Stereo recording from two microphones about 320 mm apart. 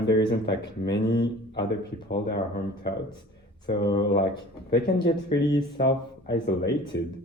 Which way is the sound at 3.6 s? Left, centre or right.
Left.